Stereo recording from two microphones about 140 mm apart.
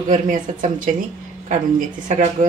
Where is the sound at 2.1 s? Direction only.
55° right (ahead or behind).